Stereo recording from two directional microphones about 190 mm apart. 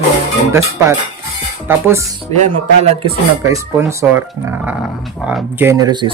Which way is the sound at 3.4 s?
15° right (ahead or behind).